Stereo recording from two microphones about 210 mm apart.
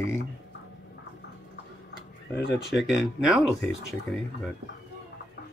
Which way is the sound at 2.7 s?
Centre (ahead or behind).